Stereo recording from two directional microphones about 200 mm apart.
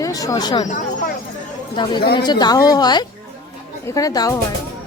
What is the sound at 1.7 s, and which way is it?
A woman's voice, 25° left (ahead or behind).